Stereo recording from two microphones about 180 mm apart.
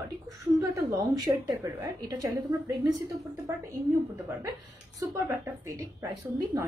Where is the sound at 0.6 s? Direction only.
20° right (ahead or behind).